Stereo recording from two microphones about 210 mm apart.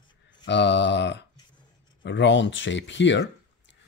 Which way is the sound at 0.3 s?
55° left (ahead or behind).